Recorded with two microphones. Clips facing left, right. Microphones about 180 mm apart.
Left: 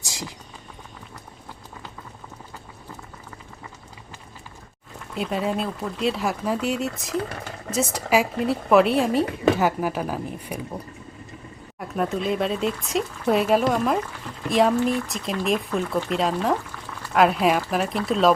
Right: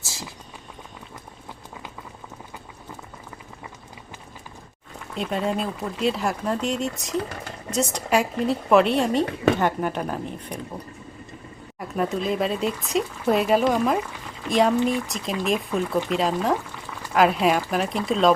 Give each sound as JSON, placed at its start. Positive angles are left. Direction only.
{"t": 0.0, "sound": "clip-clop", "side_deg": 15}
{"t": 5.1, "sound": "speech", "side_deg": 5}
{"t": 11.8, "sound": "speech", "side_deg": 0}